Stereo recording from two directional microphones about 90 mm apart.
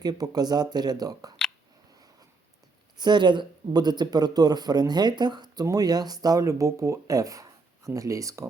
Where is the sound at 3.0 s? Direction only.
55° right (ahead or behind); by 8.5 s 35° right (ahead or behind).